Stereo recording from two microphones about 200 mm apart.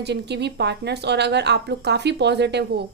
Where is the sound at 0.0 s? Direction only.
55° right (ahead or behind).